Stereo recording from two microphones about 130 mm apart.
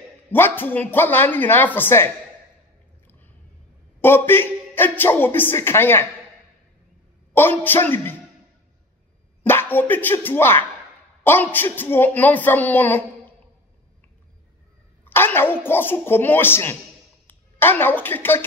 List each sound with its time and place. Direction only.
0.3 s speech: 15° left (ahead or behind)
4.0 s speech: 15° left (ahead or behind)
7.3 s speech: 15° left (ahead or behind)
9.4 s speech: 15° left (ahead or behind)
15.0 s a woman's voice: 15° left (ahead or behind)